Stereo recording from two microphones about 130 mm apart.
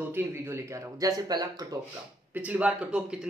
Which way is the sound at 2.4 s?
10° right (ahead or behind).